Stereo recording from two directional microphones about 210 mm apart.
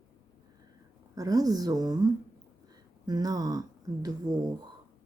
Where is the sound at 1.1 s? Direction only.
15° right (ahead or behind).